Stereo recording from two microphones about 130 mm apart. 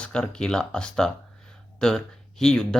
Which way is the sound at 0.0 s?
5° left (ahead or behind).